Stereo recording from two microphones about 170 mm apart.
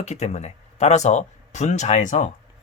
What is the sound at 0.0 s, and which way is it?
Speech, 40° left (ahead or behind).